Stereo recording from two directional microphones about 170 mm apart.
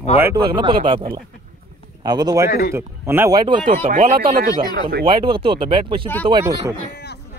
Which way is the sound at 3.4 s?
30° right (ahead or behind).